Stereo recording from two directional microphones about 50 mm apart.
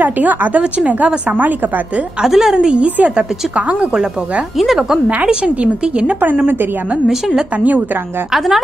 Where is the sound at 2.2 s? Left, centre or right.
Centre.